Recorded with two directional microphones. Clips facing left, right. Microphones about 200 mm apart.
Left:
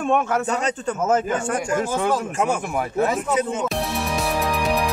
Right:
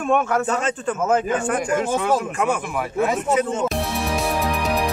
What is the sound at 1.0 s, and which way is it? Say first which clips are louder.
Speech: right 1 dB; 40° left (ahead or behind).